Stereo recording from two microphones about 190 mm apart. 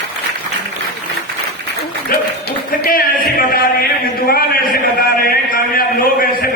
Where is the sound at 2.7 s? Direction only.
50° left (ahead or behind).